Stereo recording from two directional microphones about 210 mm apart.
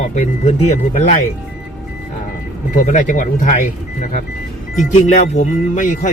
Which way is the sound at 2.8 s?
35° left (ahead or behind).